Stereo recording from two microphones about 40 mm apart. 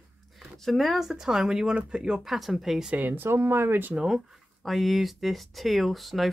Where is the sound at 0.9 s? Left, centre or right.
Centre.